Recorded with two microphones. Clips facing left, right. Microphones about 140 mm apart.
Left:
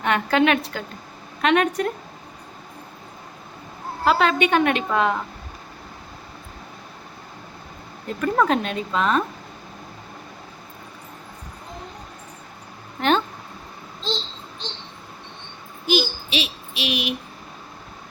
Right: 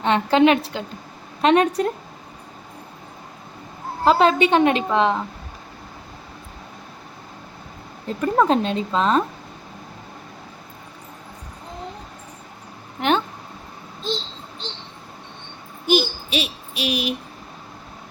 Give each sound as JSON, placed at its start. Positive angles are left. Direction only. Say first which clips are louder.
{"t": 0.0, "sound": "a woman's voice", "louder": "right 3 dB", "side_deg": -25}
{"t": 4.0, "sound": "a woman's voice", "louder": "right 3 dB", "side_deg": -30}
{"t": 8.0, "sound": "a woman's voice", "louder": "right 2 dB", "side_deg": -25}
{"t": 13.0, "sound": "a sound", "louder": "even", "side_deg": -15}
{"t": 15.9, "sound": "child singing", "louder": "right 2 dB", "side_deg": -50}